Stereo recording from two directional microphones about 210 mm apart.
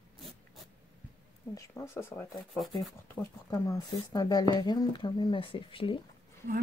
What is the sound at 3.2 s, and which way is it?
Speech, 15° left (ahead or behind).